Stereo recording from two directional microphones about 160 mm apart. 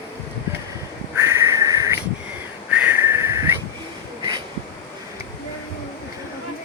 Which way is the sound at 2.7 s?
10° right (ahead or behind).